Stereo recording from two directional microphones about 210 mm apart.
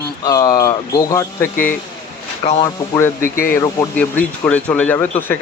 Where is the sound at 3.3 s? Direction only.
40° left (ahead or behind).